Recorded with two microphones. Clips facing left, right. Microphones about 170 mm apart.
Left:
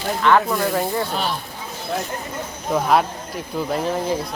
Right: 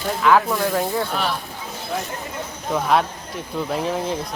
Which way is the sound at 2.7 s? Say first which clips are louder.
Left 2 dB; 5° left (ahead or behind).